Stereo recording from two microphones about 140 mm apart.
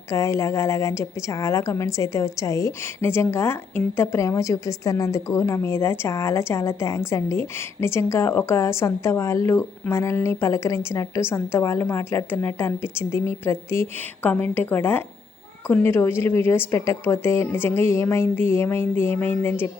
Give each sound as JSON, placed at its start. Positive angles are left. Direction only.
{"t": 0.1, "sound": "a woman's voice", "side_deg": 20}